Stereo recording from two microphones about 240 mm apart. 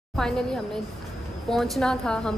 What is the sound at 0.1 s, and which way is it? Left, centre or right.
A woman's voice, centre.